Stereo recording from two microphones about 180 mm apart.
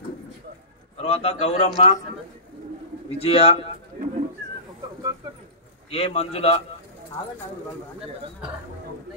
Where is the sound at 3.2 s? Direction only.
30° left (ahead or behind).